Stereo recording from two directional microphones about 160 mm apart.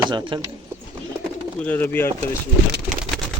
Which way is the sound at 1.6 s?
10° left (ahead or behind).